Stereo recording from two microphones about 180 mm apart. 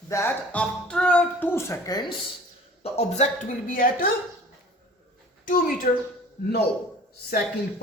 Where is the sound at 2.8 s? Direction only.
35° left (ahead or behind).